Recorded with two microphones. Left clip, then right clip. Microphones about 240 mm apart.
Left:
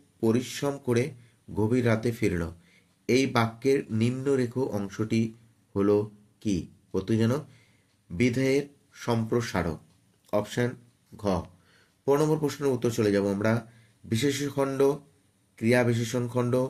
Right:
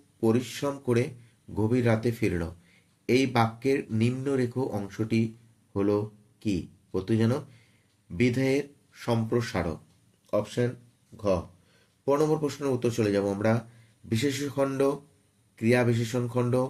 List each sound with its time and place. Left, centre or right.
0.2 s speech: centre
12.0 s speech: centre